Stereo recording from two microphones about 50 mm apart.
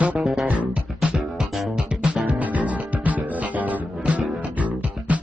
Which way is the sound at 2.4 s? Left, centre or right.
Right.